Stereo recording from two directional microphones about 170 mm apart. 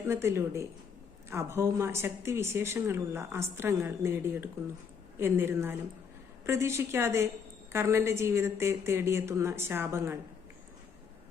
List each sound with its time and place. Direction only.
0.0 s speech: 15° right (ahead or behind)